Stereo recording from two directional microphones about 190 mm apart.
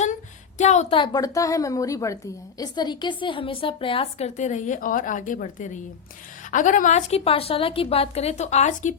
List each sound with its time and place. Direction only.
0.6 s a woman's voice: 35° left (ahead or behind)